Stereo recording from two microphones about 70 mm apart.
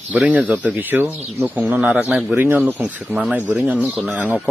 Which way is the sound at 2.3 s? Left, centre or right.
Right.